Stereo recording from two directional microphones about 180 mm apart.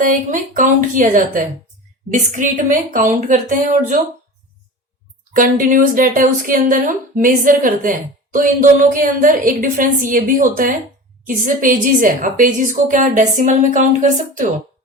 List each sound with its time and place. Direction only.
0.0 s speech: 45° right (ahead or behind)
5.3 s speech: 50° right (ahead or behind)